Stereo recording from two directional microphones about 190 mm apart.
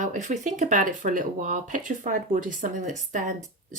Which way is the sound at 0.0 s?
40° right (ahead or behind).